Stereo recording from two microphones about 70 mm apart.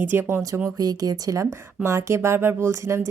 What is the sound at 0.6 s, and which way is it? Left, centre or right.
Speech, right.